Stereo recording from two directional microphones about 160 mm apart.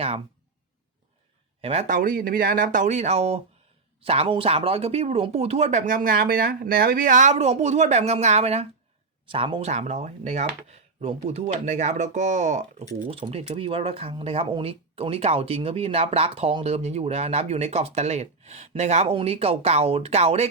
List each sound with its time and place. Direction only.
1.6 s speech: 45° right (ahead or behind)
2.0 s speech: 60° right (ahead or behind)
13.1 s speech: 35° right (ahead or behind)